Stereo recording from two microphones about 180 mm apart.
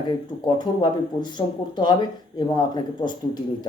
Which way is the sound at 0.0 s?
25° left (ahead or behind).